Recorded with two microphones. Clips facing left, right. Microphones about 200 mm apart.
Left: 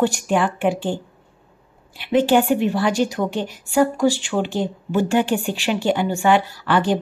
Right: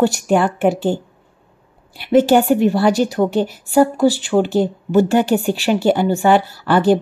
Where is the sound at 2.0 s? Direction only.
40° right (ahead or behind).